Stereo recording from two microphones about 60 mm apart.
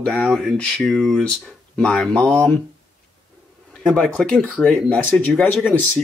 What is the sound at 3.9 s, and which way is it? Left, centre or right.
Speech, centre.